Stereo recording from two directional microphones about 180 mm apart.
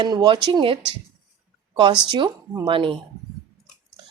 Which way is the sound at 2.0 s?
25° right (ahead or behind).